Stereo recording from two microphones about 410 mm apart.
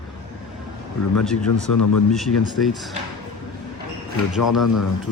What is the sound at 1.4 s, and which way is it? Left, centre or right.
Speech, left.